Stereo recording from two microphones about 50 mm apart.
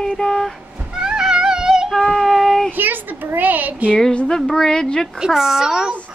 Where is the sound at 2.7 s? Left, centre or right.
Right.